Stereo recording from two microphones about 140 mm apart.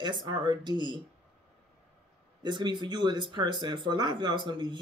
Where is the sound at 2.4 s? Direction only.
35° right (ahead or behind).